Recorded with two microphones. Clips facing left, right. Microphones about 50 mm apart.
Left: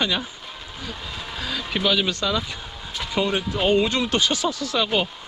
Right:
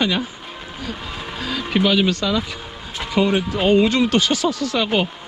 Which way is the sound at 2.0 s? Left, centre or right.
Right.